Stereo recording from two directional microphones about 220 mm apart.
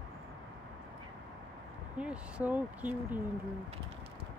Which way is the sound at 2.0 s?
5° right (ahead or behind).